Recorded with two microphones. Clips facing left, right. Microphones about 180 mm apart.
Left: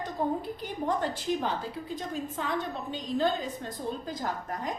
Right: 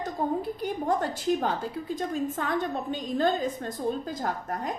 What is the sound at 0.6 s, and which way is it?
A woman's voice, 45° right (ahead or behind).